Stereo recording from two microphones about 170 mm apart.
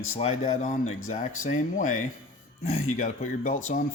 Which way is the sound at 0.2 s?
40° left (ahead or behind).